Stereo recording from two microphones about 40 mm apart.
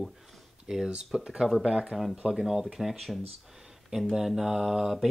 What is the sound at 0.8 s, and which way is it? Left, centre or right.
Speech, right.